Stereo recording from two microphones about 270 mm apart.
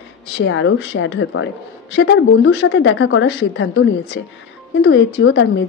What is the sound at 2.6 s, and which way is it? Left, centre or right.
A woman's voice, left.